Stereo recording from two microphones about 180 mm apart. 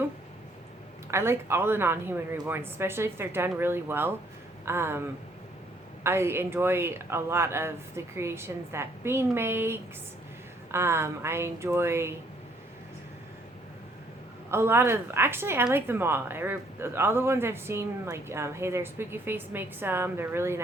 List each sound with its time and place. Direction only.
1.1 s a woman's voice: 15° right (ahead or behind)
14.5 s a woman's voice: 15° right (ahead or behind)